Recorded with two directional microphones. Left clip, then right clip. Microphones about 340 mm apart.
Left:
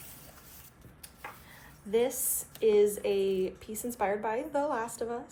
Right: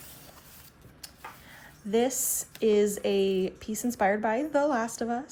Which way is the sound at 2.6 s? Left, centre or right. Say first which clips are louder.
Even; right.